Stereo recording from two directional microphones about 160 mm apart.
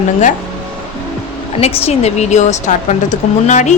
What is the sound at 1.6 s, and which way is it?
Speech, 40° left (ahead or behind).